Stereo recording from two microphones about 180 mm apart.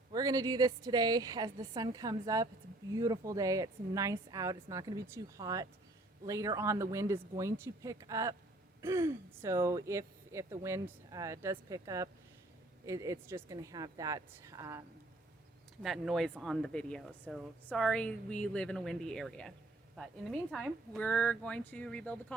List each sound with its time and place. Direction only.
0.1 s a woman's voice: 20° right (ahead or behind)
15.8 s a woman's voice: centre (ahead or behind)